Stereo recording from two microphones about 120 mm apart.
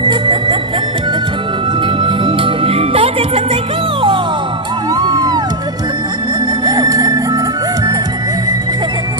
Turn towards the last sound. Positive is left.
turn(degrees=-30)  # may be behind; listen again after turning